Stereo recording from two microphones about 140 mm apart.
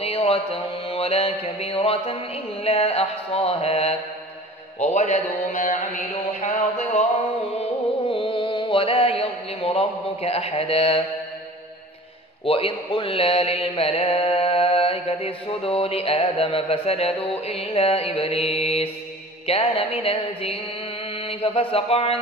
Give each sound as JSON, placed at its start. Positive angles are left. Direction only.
{"t": 0.0, "sound": "a man's voice", "side_deg": 45}
{"t": 8.1, "sound": "mantra", "side_deg": 35}
{"t": 12.4, "sound": "speech", "side_deg": 40}
{"t": 21.2, "sound": "mantra", "side_deg": 40}